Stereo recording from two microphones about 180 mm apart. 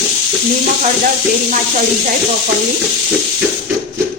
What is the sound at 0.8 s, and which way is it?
Speech, 45° right (ahead or behind).